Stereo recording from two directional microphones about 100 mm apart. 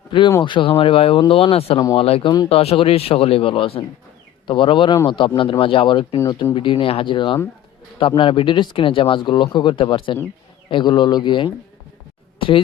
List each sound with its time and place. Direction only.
0.4 s speech: 60° left (ahead or behind)
4.4 s a man's voice: 55° left (ahead or behind)